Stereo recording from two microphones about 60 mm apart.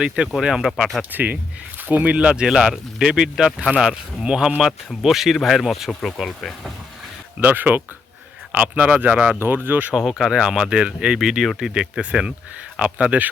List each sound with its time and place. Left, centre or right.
0.4 s speech: centre
1.1 s speech: right
2.1 s speech: centre
7.3 s speech: right
9.4 s speech: right
10.1 s speech: centre; by 13.2 s right